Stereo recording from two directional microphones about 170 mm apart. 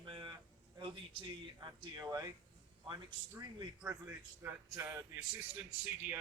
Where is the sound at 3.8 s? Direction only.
10° right (ahead or behind).